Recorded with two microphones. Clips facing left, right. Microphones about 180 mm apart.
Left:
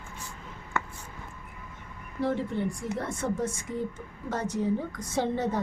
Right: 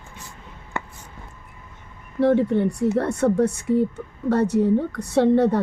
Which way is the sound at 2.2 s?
65° right (ahead or behind).